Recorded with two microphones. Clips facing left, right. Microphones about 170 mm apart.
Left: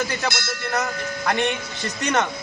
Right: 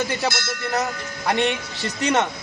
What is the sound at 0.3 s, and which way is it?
Speech, 20° right (ahead or behind).